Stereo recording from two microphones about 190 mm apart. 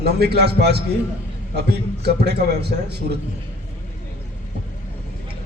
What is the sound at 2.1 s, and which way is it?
Speech, 60° right (ahead or behind).